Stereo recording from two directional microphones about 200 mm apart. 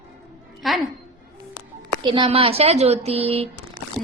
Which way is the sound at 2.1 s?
25° right (ahead or behind).